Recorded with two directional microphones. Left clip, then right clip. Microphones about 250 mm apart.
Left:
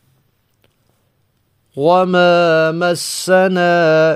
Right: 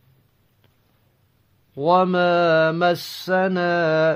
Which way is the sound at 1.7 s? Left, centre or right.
Left.